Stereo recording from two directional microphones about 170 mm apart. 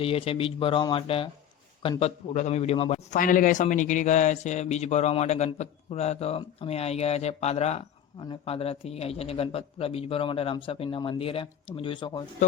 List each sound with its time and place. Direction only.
0.0 s speech: 35° left (ahead or behind)
3.2 s speech: 55° left (ahead or behind); by 12.2 s 30° left (ahead or behind)
12.4 s speech: 45° left (ahead or behind)